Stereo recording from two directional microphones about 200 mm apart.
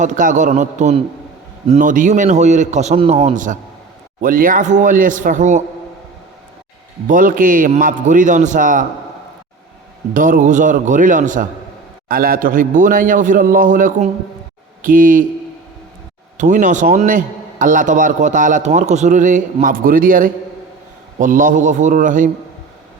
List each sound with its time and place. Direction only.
0.0 s a man's voice: 40° right (ahead or behind)
7.1 s a man's voice: 45° right (ahead or behind)
10.2 s a man's voice: 40° right (ahead or behind)
16.4 s a man's voice: 40° right (ahead or behind)